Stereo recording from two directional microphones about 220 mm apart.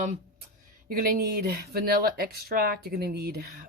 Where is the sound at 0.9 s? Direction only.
40° right (ahead or behind).